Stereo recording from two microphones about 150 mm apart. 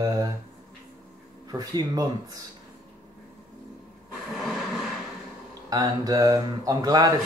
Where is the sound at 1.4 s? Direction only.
25° right (ahead or behind).